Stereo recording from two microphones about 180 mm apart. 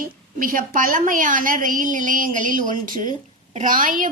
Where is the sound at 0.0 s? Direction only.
50° right (ahead or behind).